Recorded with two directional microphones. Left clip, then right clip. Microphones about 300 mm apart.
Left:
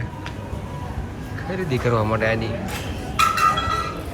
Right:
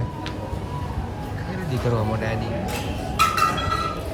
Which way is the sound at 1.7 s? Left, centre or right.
Centre.